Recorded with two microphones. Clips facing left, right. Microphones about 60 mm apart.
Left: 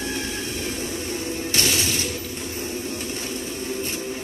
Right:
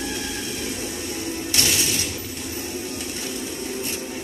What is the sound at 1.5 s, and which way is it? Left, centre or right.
Music, left.